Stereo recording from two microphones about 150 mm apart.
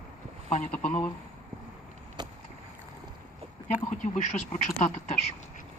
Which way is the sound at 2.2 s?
30° right (ahead or behind).